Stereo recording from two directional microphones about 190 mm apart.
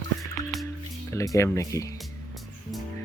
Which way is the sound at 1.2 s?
15° left (ahead or behind).